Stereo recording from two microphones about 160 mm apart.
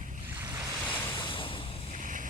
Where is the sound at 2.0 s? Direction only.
55° right (ahead or behind).